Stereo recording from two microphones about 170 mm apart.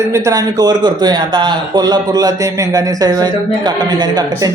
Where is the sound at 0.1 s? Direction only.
20° right (ahead or behind).